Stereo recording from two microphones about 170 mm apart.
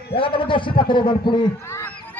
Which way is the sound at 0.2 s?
30° left (ahead or behind).